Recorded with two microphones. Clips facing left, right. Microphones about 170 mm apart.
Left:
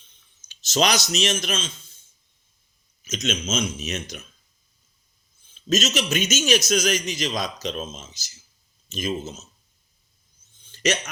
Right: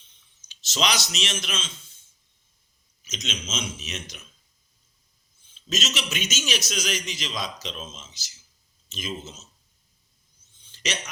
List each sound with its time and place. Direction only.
0.4 s speech: 45° left (ahead or behind)
3.0 s speech: 50° left (ahead or behind)
5.5 s speech: 45° left (ahead or behind)
10.6 s a sound: 50° left (ahead or behind)